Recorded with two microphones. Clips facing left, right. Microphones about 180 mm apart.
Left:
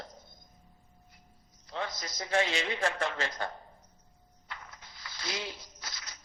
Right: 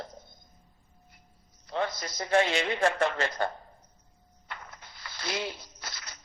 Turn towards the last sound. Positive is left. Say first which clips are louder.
# right 3 dB
turn(degrees=-60)  # may be behind; listen again after turning